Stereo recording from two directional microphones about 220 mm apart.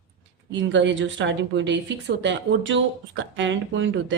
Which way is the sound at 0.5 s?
55° right (ahead or behind).